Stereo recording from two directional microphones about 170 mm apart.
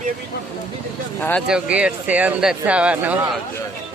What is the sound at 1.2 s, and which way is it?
Speech, 10° left (ahead or behind).